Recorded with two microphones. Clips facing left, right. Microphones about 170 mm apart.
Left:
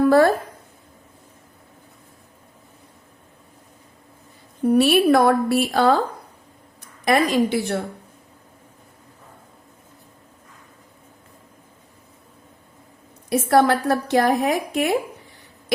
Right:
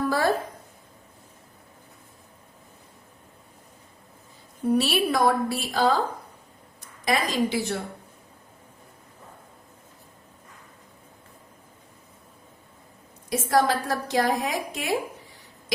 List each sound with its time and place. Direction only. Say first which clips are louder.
0.1 s a woman's voice: left 8 dB; 55° left (ahead or behind)
4.7 s a woman's voice: left 8 dB; 55° left (ahead or behind)
7.0 s a woman's voice: left 6 dB; 60° left (ahead or behind)
13.3 s a woman's voice: left 5 dB; 60° left (ahead or behind)